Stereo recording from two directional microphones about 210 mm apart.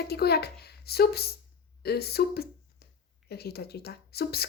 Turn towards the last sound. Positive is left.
turn(degrees=50)  # may be behind; listen again after turning